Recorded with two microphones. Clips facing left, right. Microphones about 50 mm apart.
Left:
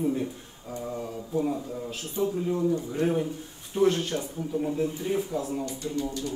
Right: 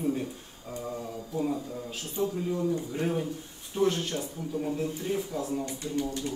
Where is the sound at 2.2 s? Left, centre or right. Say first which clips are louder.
Left 3 dB; left.